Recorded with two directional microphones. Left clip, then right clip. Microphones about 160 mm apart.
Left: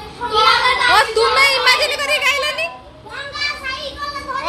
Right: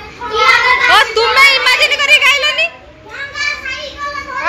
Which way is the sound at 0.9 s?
15° left (ahead or behind).